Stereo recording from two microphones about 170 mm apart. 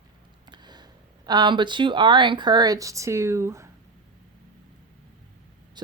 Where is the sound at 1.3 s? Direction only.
25° right (ahead or behind).